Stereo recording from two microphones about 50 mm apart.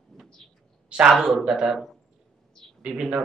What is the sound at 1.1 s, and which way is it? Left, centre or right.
Speech, centre.